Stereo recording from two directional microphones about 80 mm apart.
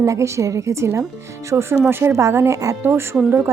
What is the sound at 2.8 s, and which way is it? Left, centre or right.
Speech, right.